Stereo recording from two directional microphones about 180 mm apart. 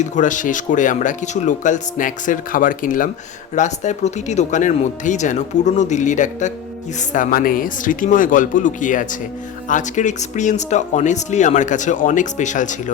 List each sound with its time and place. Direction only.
0.0 s speech: 45° left (ahead or behind)